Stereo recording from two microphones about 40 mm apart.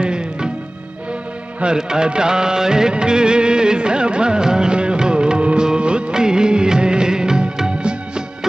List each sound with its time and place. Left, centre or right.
0.0 s music: right
1.6 s music of bollywood: centre